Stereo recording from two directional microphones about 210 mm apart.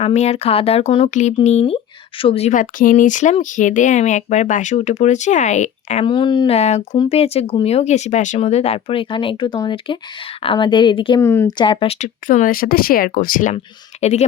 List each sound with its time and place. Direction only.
0.0 s speech: 30° left (ahead or behind)